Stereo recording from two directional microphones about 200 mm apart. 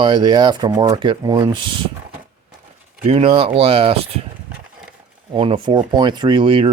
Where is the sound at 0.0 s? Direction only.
25° right (ahead or behind).